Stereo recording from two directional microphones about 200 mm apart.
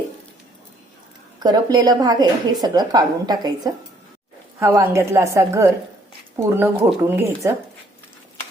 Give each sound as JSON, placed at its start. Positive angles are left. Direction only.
{"t": 1.4, "sound": "a woman's voice", "side_deg": -20}